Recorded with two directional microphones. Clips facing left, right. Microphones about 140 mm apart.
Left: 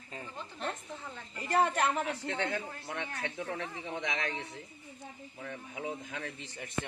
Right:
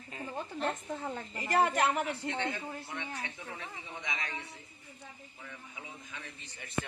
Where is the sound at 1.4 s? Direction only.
5° right (ahead or behind).